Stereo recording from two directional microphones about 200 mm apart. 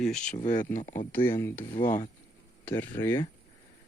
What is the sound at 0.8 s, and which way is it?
Speech, 10° left (ahead or behind).